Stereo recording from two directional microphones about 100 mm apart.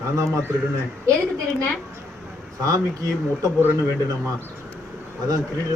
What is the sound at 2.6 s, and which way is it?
Speech, 35° right (ahead or behind).